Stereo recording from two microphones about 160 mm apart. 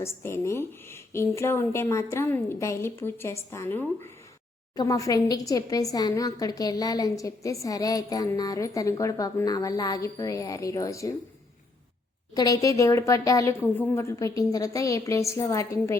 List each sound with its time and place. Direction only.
0.0 s a woman's voice: 15° left (ahead or behind)
12.3 s a woman's voice: 25° left (ahead or behind)